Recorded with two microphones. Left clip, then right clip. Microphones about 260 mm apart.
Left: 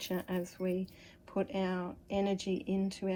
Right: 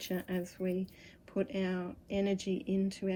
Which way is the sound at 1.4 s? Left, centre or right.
Centre.